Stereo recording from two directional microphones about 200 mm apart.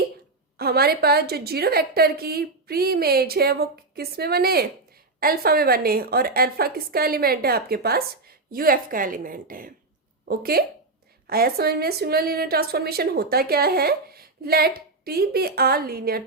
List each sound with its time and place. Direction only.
0.5 s a woman's voice: 50° right (ahead or behind)